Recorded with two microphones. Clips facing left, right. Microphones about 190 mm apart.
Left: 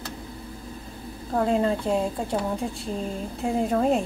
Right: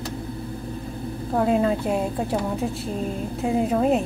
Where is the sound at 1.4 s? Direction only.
5° right (ahead or behind).